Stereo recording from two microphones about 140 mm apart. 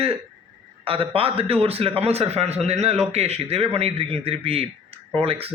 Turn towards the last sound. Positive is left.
turn(degrees=-45)  # may be behind; listen again after turning